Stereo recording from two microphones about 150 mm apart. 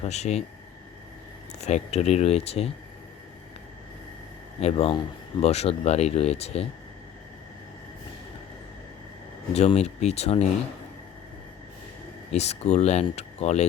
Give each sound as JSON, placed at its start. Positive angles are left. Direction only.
{"t": 0.0, "sound": "speech", "side_deg": 50}
{"t": 1.5, "sound": "speech", "side_deg": 45}
{"t": 4.6, "sound": "speech", "side_deg": 40}
{"t": 9.5, "sound": "speech", "side_deg": 45}
{"t": 12.3, "sound": "speech", "side_deg": 45}